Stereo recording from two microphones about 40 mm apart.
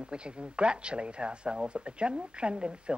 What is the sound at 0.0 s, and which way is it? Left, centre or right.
A man's voice, right.